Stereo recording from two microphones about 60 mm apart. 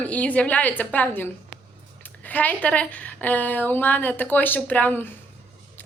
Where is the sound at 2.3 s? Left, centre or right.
Left.